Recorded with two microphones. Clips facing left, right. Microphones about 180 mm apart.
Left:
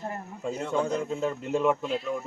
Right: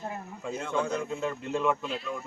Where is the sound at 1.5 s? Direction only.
10° left (ahead or behind).